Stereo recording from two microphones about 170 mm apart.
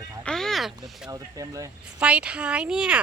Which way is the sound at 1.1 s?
20° right (ahead or behind).